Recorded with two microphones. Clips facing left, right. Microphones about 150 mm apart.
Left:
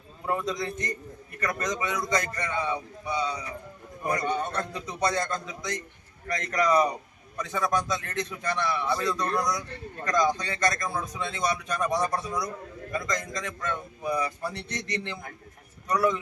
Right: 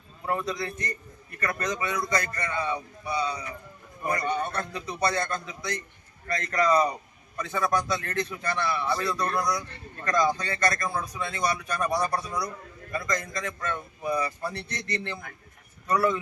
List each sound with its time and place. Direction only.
0.3 s a man's voice: 15° left (ahead or behind)
9.2 s a man's voice: 5° right (ahead or behind)
10.0 s a man's voice: 15° left (ahead or behind)